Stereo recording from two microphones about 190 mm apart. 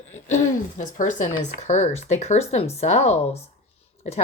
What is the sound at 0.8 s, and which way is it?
Speech, 40° left (ahead or behind).